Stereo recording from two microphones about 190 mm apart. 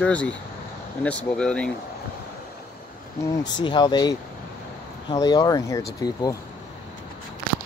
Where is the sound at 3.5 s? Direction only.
25° left (ahead or behind).